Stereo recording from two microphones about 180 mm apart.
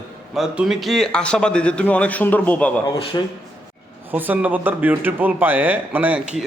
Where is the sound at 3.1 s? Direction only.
20° left (ahead or behind).